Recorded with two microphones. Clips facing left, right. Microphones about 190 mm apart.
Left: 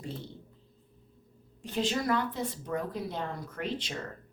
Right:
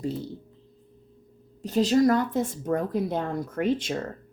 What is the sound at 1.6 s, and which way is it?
A woman's voice, 40° right (ahead or behind).